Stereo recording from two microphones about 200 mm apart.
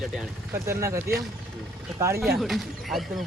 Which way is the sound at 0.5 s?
15° right (ahead or behind).